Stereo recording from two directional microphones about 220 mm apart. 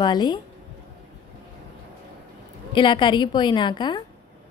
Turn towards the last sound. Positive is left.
turn(degrees=20)  # may be behind; listen again after turning